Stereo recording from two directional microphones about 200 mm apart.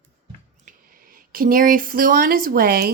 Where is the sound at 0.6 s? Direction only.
45° right (ahead or behind).